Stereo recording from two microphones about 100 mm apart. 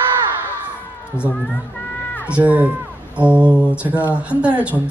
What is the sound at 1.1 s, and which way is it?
Speech, 25° left (ahead or behind).